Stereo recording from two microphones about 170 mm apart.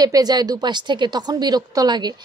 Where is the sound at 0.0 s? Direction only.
25° right (ahead or behind).